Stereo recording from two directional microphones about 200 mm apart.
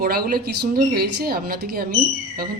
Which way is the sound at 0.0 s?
50° right (ahead or behind).